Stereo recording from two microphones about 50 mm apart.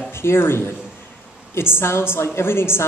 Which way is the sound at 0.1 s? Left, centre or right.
Left.